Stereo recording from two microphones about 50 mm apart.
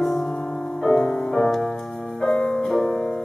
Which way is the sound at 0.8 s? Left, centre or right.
Centre.